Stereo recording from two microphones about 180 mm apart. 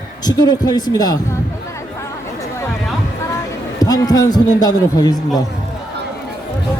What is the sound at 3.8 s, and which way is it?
A man's voice, 20° left (ahead or behind).